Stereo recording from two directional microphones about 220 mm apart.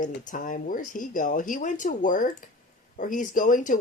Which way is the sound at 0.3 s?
35° left (ahead or behind).